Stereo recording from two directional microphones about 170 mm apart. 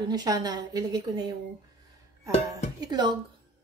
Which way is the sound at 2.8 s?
25° right (ahead or behind).